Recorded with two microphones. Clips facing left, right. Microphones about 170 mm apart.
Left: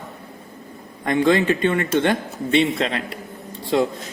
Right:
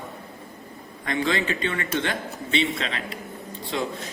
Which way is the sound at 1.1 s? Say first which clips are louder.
Left 8 dB; 50° left (ahead or behind).